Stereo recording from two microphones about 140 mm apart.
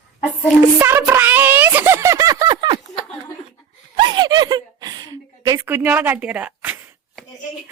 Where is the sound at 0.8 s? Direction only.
15° right (ahead or behind).